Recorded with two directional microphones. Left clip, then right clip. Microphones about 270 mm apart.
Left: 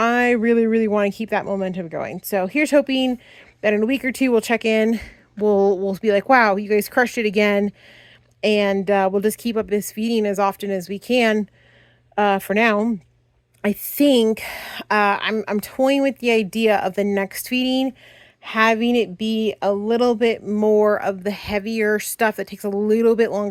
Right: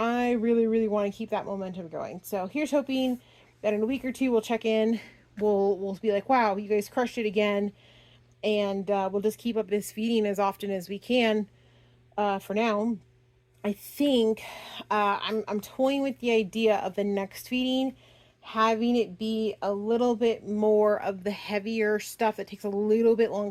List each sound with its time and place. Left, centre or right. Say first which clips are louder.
0.0 s speech: left 9 dB; left